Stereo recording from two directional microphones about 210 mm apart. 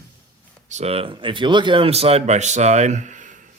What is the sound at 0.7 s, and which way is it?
Speech, 30° right (ahead or behind).